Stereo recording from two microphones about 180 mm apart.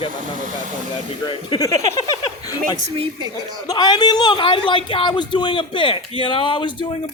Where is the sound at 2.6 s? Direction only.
40° right (ahead or behind).